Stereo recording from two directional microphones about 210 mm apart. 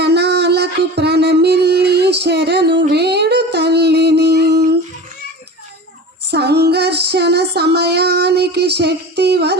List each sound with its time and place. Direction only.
0.0 s music: 50° right (ahead or behind)
2.8 s a sound: 50° right (ahead or behind)
6.3 s female singing: 50° right (ahead or behind)